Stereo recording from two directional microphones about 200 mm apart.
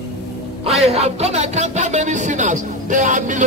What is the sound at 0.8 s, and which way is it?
Speech, 30° right (ahead or behind).